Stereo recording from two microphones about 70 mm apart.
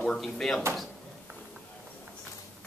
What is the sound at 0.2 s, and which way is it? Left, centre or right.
Speech, centre.